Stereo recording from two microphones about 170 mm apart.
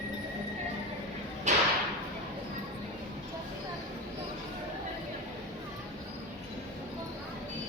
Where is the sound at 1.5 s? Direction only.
45° right (ahead or behind).